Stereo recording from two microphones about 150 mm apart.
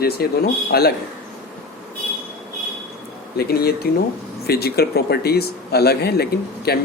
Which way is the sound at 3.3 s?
90° left.